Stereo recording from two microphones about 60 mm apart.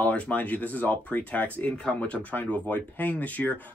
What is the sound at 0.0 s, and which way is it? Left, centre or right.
Speech, left.